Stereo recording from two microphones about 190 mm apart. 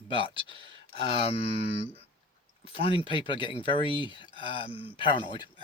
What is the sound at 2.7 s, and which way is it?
Speech, 30° left (ahead or behind).